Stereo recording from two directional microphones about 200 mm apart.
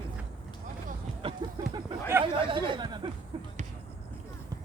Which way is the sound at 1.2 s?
25° right (ahead or behind).